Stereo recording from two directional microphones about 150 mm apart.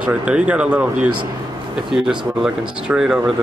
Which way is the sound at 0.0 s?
10° right (ahead or behind).